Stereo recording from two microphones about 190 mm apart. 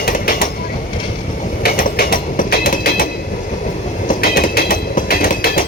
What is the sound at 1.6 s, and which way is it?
Train, 50° left (ahead or behind).